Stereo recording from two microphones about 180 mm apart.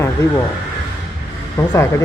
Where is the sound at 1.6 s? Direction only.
15° left (ahead or behind).